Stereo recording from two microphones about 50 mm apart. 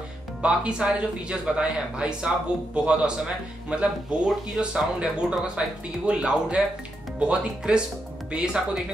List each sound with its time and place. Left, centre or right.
0.4 s speech: right